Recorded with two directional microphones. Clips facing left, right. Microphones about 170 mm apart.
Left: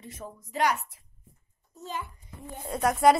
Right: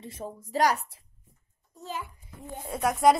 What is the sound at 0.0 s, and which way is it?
A woman's voice, 30° right (ahead or behind).